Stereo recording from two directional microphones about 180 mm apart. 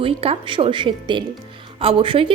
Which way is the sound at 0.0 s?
30° right (ahead or behind).